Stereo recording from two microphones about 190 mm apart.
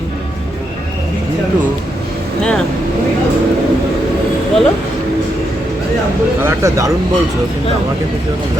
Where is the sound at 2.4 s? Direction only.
5° left (ahead or behind).